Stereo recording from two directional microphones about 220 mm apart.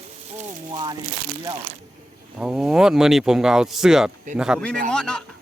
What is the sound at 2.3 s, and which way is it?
Speech, 5° right (ahead or behind).